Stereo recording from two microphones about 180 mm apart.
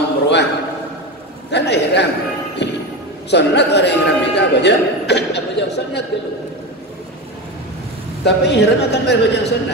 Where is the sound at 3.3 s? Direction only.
70° left (ahead or behind).